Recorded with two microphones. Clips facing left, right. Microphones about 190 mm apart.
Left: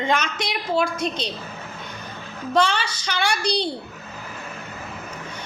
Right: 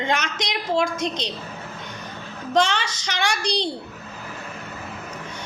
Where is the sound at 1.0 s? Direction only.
15° right (ahead or behind).